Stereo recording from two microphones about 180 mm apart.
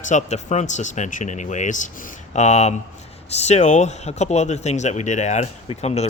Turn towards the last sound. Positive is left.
turn(degrees=35)  # may be behind; listen again after turning